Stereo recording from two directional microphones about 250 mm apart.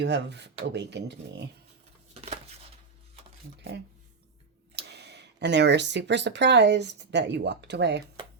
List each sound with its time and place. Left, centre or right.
0.0 s speech: right
4.7 s speech: right